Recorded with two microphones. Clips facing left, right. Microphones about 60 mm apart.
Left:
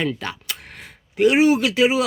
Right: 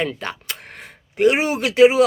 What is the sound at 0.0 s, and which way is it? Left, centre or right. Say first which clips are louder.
Speech: even; right.